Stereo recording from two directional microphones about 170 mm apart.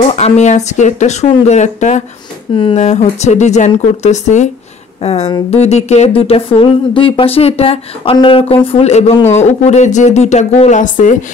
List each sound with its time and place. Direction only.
0.1 s speech: 40° left (ahead or behind)